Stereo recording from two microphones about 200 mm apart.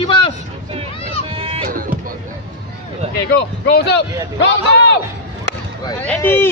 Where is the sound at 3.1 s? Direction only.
50° left (ahead or behind).